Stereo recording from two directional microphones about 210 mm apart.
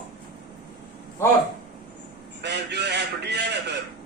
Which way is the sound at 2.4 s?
55° right (ahead or behind).